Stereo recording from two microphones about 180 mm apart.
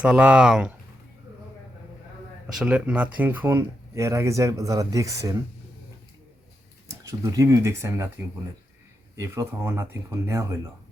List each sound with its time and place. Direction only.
0.0 s speech: 5° right (ahead or behind)
2.6 s speech: 5° right (ahead or behind)
7.0 s speech: 15° right (ahead or behind)